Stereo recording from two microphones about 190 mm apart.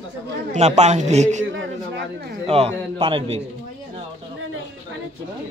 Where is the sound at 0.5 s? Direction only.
35° right (ahead or behind).